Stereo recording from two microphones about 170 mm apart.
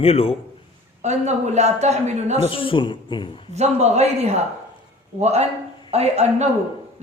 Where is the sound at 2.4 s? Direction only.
30° left (ahead or behind).